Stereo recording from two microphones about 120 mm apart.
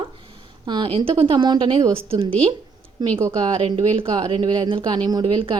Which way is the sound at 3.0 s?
35° right (ahead or behind).